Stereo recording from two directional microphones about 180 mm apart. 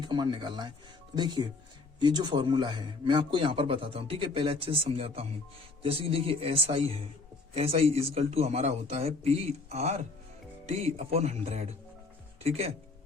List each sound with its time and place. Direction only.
0.0 s a man's voice: 25° right (ahead or behind)